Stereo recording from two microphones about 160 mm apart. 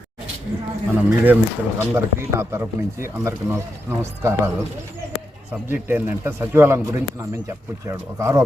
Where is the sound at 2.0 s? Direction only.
15° right (ahead or behind).